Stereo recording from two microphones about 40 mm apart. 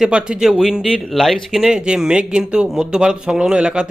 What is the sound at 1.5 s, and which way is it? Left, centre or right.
A man's voice, centre.